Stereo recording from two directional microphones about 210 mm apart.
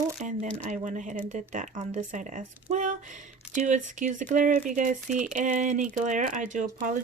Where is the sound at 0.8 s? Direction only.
35° right (ahead or behind).